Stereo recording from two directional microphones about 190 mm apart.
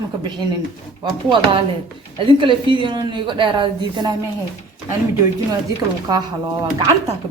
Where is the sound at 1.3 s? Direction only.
25° right (ahead or behind).